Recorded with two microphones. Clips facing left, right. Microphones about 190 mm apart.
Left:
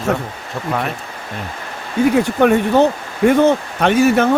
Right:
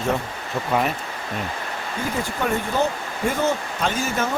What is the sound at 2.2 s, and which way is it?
Speech, 65° left (ahead or behind).